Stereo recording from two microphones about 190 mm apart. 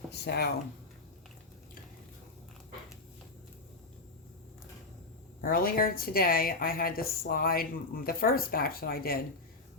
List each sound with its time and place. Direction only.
0.1 s speech: 60° left (ahead or behind)
5.4 s a woman's voice: 50° left (ahead or behind)